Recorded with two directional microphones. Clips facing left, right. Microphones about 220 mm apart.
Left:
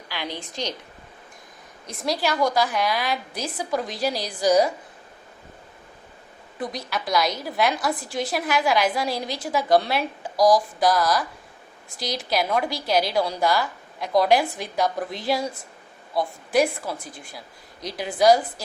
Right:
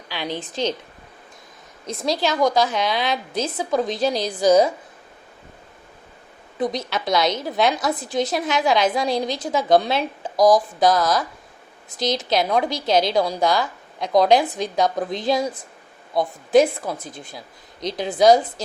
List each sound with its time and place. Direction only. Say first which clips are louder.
0.1 s a woman's voice: right 4 dB; 20° right (ahead or behind)
1.9 s a woman's voice: right 3 dB; 20° right (ahead or behind)
6.6 s a woman's voice: right 6 dB; 20° right (ahead or behind)